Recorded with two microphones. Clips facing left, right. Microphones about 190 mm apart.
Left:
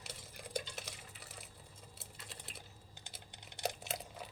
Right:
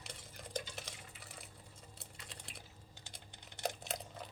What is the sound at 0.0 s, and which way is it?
Stir, 5° left (ahead or behind).